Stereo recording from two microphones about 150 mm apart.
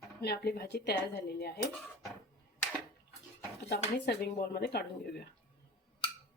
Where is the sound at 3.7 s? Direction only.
90° left.